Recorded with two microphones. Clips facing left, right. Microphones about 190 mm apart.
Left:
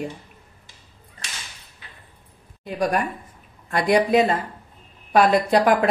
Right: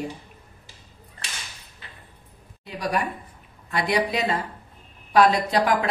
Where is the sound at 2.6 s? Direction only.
50° left (ahead or behind).